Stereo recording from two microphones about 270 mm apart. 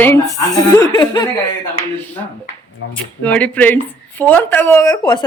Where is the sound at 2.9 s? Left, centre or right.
Centre.